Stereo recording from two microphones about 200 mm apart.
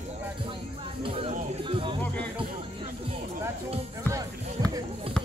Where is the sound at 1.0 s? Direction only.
25° right (ahead or behind).